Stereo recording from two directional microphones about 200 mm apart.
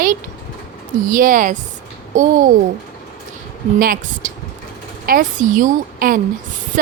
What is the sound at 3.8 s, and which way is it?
Speech, 45° right (ahead or behind).